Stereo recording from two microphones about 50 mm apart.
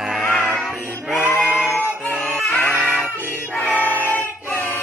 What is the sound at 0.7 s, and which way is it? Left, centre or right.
Music, centre.